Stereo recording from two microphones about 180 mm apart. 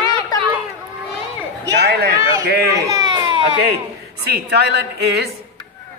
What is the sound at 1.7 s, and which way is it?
Speech, 65° right (ahead or behind).